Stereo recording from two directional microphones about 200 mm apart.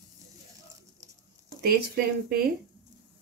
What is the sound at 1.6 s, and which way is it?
Speech, 50° right (ahead or behind).